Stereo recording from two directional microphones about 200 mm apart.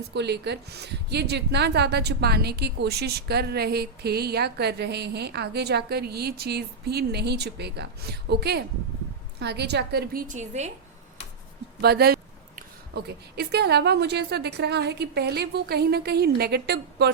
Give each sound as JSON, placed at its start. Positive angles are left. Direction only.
{"t": 0.1, "sound": "a woman's voice", "side_deg": -55}
{"t": 11.8, "sound": "a woman's voice", "side_deg": -50}